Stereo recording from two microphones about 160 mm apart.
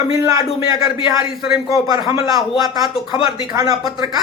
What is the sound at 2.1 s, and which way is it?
A man's voice, 25° right (ahead or behind).